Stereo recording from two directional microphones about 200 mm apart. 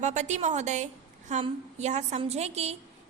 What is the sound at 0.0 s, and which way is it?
A woman's voice, 35° right (ahead or behind).